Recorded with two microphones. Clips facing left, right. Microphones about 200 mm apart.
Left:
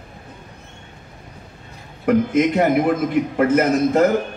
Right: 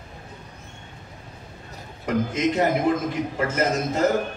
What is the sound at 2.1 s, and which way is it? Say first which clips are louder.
A man's voice: left 7 dB; 55° left (ahead or behind).